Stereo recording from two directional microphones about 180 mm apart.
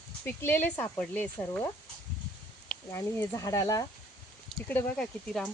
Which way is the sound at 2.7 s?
15° left (ahead or behind).